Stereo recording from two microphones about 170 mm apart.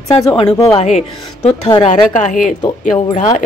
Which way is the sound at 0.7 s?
40° left (ahead or behind).